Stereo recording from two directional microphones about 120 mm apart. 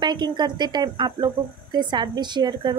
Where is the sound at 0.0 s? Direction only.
40° right (ahead or behind).